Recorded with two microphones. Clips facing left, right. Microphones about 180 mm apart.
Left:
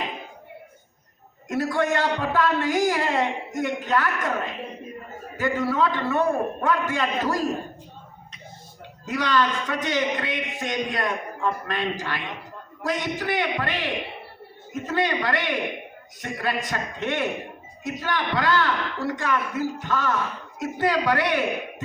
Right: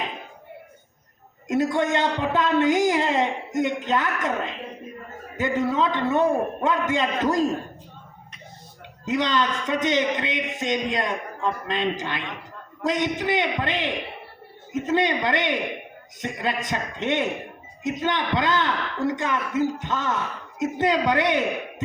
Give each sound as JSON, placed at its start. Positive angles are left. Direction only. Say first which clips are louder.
{"t": 1.5, "sound": "a man's voice", "louder": "right 2 dB", "side_deg": -20}
{"t": 9.0, "sound": "a man's voice", "louder": "even", "side_deg": -20}